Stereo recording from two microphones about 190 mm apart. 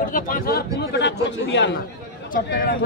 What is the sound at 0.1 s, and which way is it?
Speech, 50° left (ahead or behind).